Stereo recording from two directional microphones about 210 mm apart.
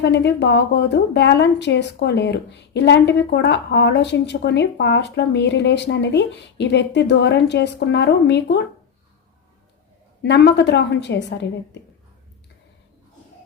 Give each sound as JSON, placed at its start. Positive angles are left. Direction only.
{"t": 0.0, "sound": "a woman's voice", "side_deg": 55}
{"t": 10.2, "sound": "a woman's voice", "side_deg": 55}